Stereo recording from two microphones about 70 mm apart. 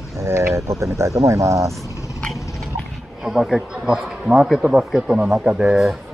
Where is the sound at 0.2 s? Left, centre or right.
Right.